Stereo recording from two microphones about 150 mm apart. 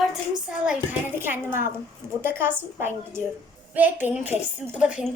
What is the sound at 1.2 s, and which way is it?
A woman's voice, 15° right (ahead or behind).